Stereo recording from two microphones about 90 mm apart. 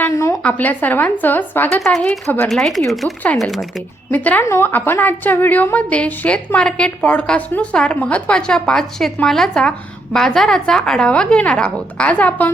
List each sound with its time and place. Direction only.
0.1 s a sound: 30° left (ahead or behind)
0.4 s speech: 20° left (ahead or behind)
1.8 s speech: 5° left (ahead or behind)
4.1 s a woman's voice: 20° left (ahead or behind)